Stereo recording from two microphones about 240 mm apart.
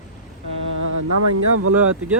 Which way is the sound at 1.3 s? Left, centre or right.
Right.